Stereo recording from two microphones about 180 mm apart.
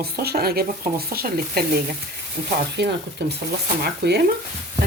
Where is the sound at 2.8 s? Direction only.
70° right (ahead or behind).